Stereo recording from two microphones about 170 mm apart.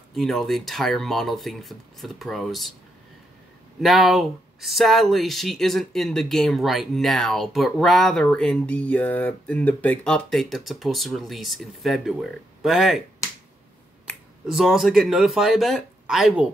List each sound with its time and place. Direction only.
0.1 s speech: centre (ahead or behind)
3.8 s speech: centre (ahead or behind)
14.0 s speech: centre (ahead or behind)